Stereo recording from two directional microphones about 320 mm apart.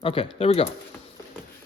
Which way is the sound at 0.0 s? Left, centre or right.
Centre.